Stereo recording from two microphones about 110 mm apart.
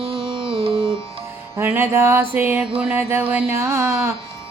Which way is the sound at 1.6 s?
20° right (ahead or behind).